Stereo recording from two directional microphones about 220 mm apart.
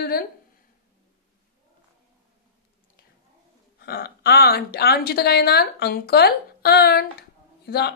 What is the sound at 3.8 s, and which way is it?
Speech, 45° left (ahead or behind).